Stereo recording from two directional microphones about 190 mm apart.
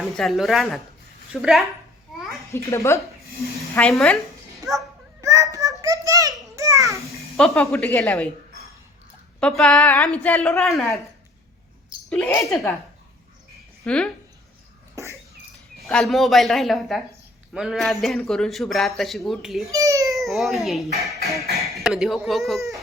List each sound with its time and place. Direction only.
0.0 s a woman's voice: centre (ahead or behind)
2.1 s a sound: centre (ahead or behind)
2.5 s speech: 15° left (ahead or behind)
5.2 s a sound: 15° right (ahead or behind)
7.5 s a woman's voice: 10° left (ahead or behind)
9.4 s a woman's voice: 5° left (ahead or behind)
12.0 s a woman's voice: 5° left (ahead or behind)
13.8 s a woman's voice: 5° left (ahead or behind)
15.8 s a woman's voice: centre (ahead or behind)
19.6 s a child's voice: 15° right (ahead or behind)
20.1 s a woman's voice: centre (ahead or behind)